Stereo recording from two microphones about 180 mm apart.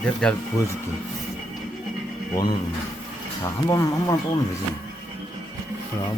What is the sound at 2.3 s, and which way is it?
Speech, 20° left (ahead or behind).